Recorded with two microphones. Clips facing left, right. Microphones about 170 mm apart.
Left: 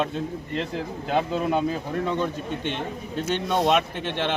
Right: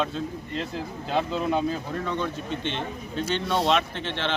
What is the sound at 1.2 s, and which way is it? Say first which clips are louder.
A man's voice: left 1 dB; 5° left (ahead or behind).